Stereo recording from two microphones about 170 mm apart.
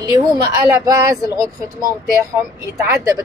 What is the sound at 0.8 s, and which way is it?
Speech, 20° right (ahead or behind).